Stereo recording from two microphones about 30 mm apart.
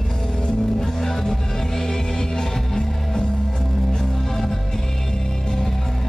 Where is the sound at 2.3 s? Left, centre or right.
Left.